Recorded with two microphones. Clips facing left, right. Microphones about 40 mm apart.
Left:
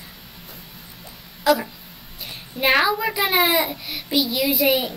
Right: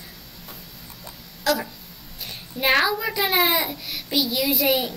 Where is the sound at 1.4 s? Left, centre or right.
Centre.